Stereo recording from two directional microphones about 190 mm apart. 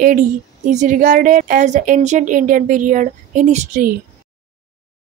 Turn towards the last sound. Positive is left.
turn(degrees=-40)  # may be behind; listen again after turning